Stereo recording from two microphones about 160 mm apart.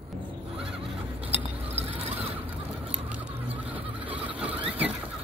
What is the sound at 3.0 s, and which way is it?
Patter, 10° right (ahead or behind).